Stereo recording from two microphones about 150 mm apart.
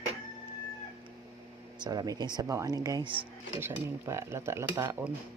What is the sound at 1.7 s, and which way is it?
Speech, 25° right (ahead or behind).